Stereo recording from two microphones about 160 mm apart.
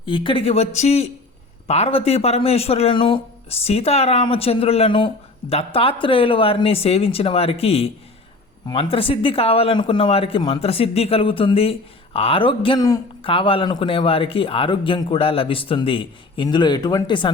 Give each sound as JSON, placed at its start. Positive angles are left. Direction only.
{"t": 0.0, "sound": "speech", "side_deg": 30}